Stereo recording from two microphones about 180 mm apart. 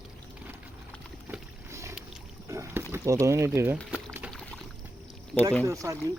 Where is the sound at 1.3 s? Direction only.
15° right (ahead or behind).